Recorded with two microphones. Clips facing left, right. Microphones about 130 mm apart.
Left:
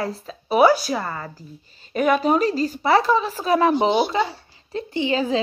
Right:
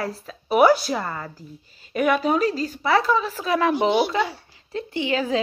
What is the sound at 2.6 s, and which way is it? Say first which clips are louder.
A woman's voice: left 2 dB; 30° left (ahead or behind).